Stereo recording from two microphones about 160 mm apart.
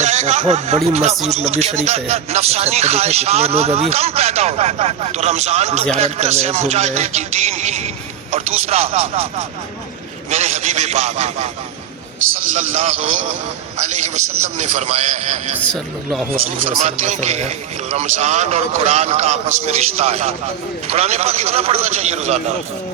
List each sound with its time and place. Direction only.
0.0 s a man's voice: 45° right (ahead or behind)
10.2 s a man's voice: 45° right (ahead or behind)
12.5 s a man's voice: 45° right (ahead or behind)
14.4 s a man's voice: 45° right (ahead or behind)
16.8 s a man's voice: 45° right (ahead or behind)